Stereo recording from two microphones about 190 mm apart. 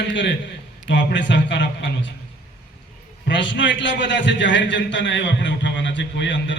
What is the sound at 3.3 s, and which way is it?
A man's voice, 70° left (ahead or behind).